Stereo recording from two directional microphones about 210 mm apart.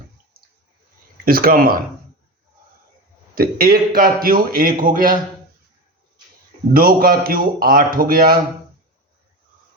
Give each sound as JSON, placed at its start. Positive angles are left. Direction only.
{"t": 0.4, "sound": "a sound", "side_deg": -45}
{"t": 1.2, "sound": "a man's voice", "side_deg": -45}
{"t": 3.3, "sound": "a man's voice", "side_deg": -45}
{"t": 6.7, "sound": "a man's voice", "side_deg": -45}